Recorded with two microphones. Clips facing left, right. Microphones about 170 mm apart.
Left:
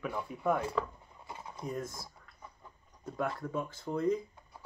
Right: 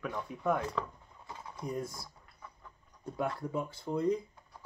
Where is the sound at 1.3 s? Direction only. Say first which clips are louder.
Left 1 dB; 20° left (ahead or behind).